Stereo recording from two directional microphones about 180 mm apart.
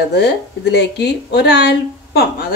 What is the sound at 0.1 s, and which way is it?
Speech, 70° left (ahead or behind).